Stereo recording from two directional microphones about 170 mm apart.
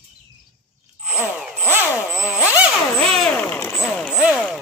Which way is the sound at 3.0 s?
5° left (ahead or behind).